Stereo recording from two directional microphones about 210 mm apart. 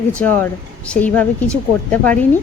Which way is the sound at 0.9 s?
5° left (ahead or behind).